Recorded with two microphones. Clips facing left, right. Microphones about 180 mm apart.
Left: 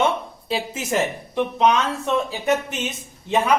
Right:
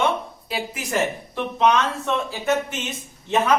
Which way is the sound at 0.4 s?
25° left (ahead or behind).